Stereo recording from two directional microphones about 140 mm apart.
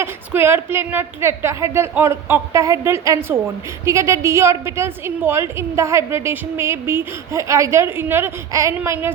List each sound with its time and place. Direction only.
0.0 s a woman's voice: 15° right (ahead or behind)